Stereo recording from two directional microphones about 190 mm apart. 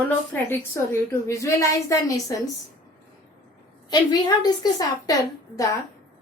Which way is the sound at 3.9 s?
20° left (ahead or behind).